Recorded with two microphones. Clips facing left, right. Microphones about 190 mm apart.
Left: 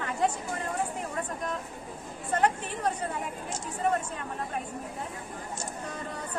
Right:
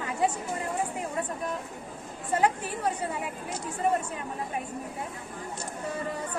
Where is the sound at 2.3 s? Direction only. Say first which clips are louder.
Right 1 dB; 10° right (ahead or behind).